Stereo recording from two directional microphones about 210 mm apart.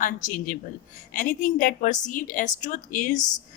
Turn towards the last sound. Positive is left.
turn(degrees=40)  # may be behind; listen again after turning